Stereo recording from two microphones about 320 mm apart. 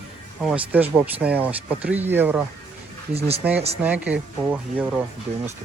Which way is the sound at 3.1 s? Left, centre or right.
Centre.